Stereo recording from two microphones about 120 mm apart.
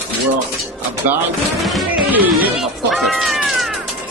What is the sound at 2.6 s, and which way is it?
Cat, centre (ahead or behind).